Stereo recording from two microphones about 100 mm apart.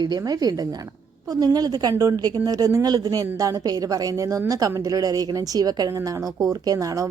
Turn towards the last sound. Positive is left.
turn(degrees=-35)  # may be behind; listen again after turning